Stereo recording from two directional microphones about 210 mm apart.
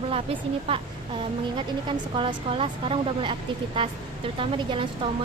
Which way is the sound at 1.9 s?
25° right (ahead or behind).